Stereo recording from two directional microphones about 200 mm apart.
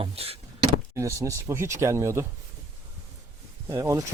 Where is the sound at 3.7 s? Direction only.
15° right (ahead or behind).